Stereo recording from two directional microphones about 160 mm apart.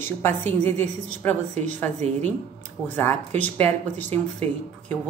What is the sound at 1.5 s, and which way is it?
Speech, 50° right (ahead or behind).